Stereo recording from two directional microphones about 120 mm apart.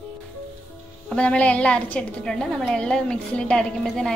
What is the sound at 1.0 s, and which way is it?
A woman's voice, 10° left (ahead or behind).